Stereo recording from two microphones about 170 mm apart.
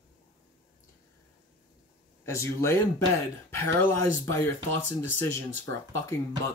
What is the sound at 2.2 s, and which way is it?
Speech, 15° left (ahead or behind).